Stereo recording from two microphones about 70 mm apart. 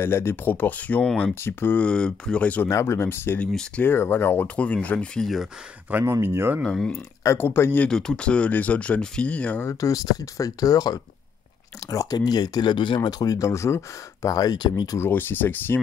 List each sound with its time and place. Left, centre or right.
0.0 s speech: left
1.9 s speech: centre
2.7 s speech: left; by 5.2 s centre
5.2 s speech: centre
5.9 s speech: right
6.6 s speech: centre
7.3 s speech: left
7.9 s speech: centre
9.7 s speech: left
14.3 s speech: left
15.0 s speech: left